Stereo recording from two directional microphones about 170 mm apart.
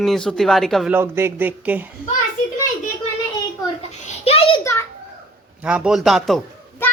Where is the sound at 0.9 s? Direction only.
15° right (ahead or behind).